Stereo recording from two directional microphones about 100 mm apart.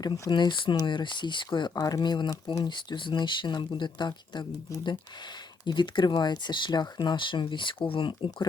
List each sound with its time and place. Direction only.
0.1 s speech: 50° left (ahead or behind)